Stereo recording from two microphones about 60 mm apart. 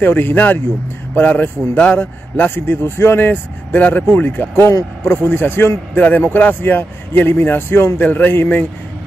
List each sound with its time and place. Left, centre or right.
0.0 s a man's voice: left